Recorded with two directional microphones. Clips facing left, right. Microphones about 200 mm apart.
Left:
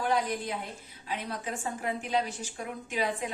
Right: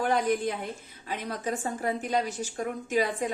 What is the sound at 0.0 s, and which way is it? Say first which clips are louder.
A woman's voice: right 4 dB; 50° right (ahead or behind).